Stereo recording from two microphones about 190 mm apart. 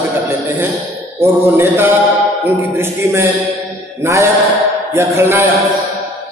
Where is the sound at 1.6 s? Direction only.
10° right (ahead or behind).